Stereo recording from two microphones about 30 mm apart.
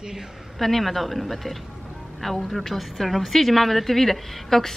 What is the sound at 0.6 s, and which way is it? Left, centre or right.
A woman's voice, centre.